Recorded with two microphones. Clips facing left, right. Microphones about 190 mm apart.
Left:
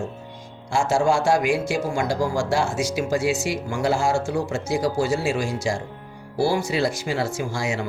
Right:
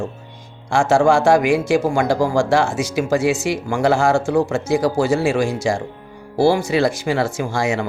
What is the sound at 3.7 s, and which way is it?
Speech, 90° right.